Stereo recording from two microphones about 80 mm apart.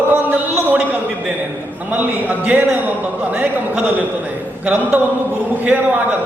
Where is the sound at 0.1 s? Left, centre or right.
Right.